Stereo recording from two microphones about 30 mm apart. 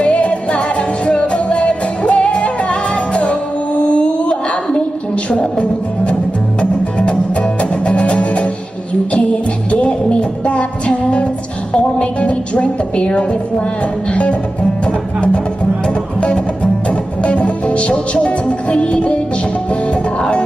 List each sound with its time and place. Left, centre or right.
0.1 s music: left
2.1 s music: left
4.7 s a sound: left
6.6 s music: left
7.9 s music: left
9.7 s music: left
12.0 s speech: left
14.9 s music: left